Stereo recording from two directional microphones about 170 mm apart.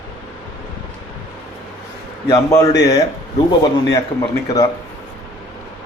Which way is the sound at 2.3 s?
20° left (ahead or behind).